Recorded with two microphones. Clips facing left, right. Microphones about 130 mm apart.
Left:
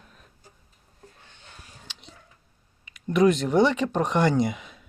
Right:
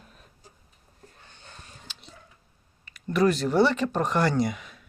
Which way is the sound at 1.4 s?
Centre (ahead or behind).